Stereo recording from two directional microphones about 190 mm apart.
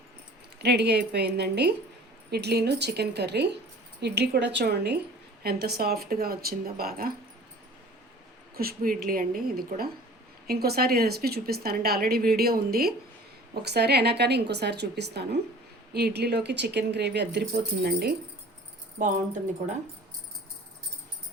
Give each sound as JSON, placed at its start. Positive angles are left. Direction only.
{"t": 0.6, "sound": "a woman's voice", "side_deg": -60}
{"t": 8.5, "sound": "a woman's voice", "side_deg": -50}
{"t": 18.9, "sound": "a woman's voice", "side_deg": -45}